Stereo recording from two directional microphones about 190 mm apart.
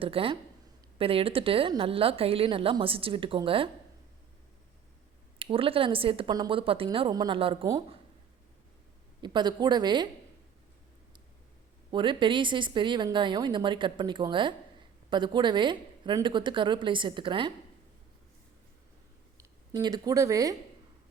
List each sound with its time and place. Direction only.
0.0 s speech: 30° right (ahead or behind)
5.4 s speech: 30° right (ahead or behind)
9.2 s speech: 25° right (ahead or behind)
11.9 s speech: 25° right (ahead or behind)
19.4 s speech: 20° right (ahead or behind)